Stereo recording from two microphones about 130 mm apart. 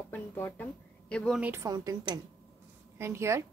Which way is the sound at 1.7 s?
30° right (ahead or behind).